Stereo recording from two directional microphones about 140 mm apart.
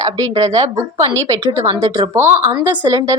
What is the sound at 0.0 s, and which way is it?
A woman's voice, 25° right (ahead or behind).